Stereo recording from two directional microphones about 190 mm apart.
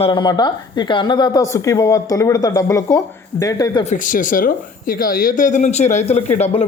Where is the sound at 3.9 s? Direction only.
45° left (ahead or behind).